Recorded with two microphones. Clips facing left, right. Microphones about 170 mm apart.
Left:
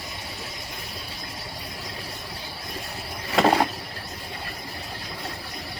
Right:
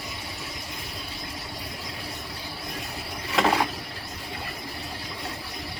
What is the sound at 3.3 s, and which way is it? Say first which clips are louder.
Vehicle: left 3 dB; 40° left (ahead or behind).